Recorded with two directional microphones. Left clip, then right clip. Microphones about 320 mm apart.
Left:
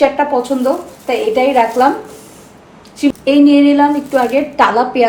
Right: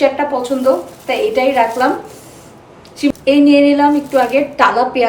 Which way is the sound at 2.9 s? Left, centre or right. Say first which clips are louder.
Left 1 dB; centre.